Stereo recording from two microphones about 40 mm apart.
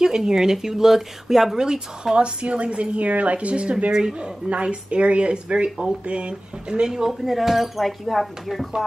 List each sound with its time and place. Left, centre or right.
0.0 s speech: centre
6.9 s speech: centre